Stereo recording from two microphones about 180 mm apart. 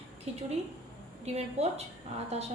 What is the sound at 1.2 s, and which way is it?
Speech, 35° right (ahead or behind).